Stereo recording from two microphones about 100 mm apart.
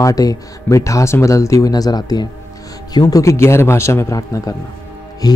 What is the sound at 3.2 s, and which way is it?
Speech, 25° left (ahead or behind).